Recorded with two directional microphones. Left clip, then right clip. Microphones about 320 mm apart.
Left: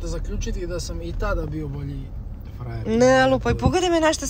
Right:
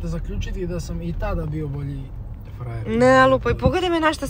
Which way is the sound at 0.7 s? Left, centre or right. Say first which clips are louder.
Left 4 dB; left.